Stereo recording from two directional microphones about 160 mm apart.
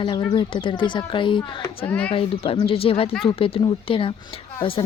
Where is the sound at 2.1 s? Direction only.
35° left (ahead or behind).